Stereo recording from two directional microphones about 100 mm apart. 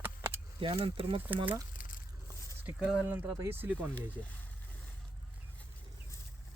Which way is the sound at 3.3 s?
25° right (ahead or behind).